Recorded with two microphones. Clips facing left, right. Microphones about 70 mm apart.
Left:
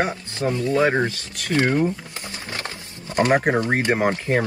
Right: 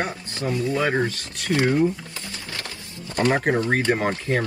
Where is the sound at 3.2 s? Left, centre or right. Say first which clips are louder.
Left 2 dB; left.